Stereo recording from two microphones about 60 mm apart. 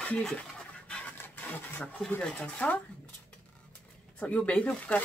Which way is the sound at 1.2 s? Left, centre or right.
Left.